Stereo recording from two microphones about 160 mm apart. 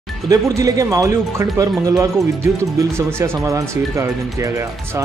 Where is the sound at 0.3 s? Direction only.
20° right (ahead or behind).